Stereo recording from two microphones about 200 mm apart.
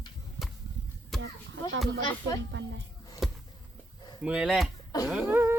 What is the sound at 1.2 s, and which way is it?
A child's voice, 65° right (ahead or behind).